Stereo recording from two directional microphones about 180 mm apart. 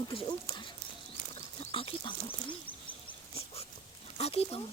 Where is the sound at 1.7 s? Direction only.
30° left (ahead or behind).